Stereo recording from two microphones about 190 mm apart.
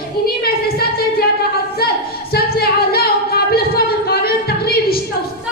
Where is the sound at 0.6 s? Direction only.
55° left (ahead or behind).